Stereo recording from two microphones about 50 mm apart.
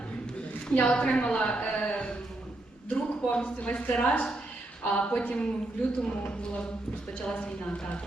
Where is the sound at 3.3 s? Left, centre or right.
Left.